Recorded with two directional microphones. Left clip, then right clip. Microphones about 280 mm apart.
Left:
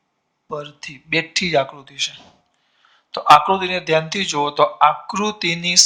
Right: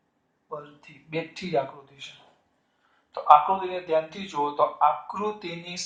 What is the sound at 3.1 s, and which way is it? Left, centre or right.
Speech, left.